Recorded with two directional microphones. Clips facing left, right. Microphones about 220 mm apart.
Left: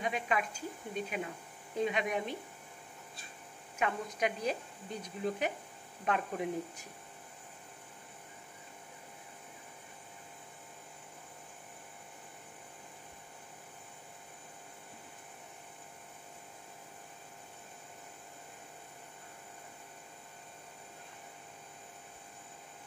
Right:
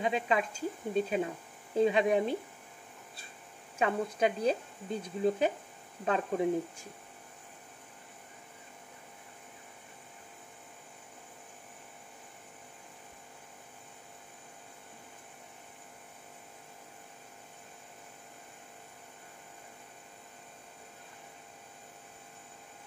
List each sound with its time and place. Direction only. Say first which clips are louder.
0.0 s a woman's voice: right 4 dB; 25° right (ahead or behind)
3.7 s a woman's voice: right 5 dB; 30° right (ahead or behind)